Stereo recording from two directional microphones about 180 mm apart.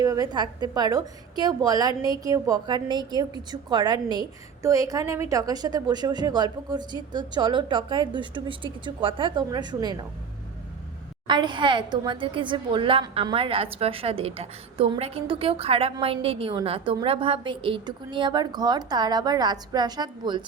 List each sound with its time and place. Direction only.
0.0 s a woman's voice: 20° right (ahead or behind)
11.3 s a woman's voice: 25° right (ahead or behind)